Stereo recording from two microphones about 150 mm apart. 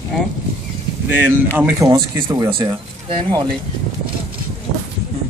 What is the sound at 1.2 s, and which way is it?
Speech, 15° right (ahead or behind).